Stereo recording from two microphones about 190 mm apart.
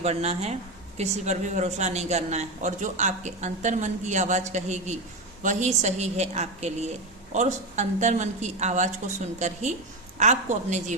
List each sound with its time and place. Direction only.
0.0 s speech: 35° right (ahead or behind)